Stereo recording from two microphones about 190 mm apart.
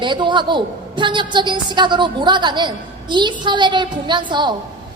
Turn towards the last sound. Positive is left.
turn(degrees=-25)  # may be behind; listen again after turning